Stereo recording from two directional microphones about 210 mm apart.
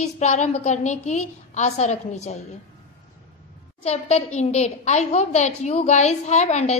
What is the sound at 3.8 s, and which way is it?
A woman's voice, 30° left (ahead or behind).